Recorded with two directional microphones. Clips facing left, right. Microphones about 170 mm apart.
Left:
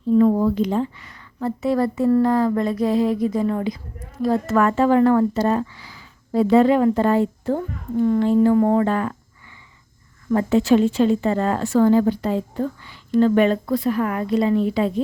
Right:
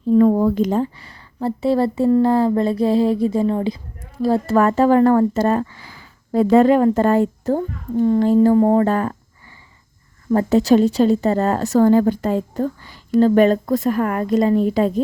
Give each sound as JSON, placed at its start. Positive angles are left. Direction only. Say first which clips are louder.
{"t": 0.1, "sound": "a woman's voice", "louder": "right 2 dB", "side_deg": -45}
{"t": 10.2, "sound": "a woman's voice", "louder": "right 2 dB", "side_deg": -40}